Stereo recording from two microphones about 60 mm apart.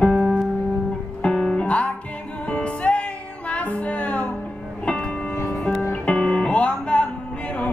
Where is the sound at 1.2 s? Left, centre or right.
Centre.